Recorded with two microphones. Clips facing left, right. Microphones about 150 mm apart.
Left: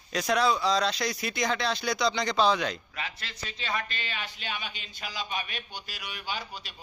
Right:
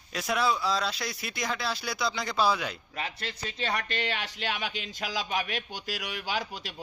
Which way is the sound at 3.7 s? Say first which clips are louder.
Right 1 dB; 70° right (ahead or behind).